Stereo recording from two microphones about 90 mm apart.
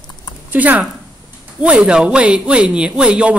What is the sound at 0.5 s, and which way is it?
Speech, 20° right (ahead or behind).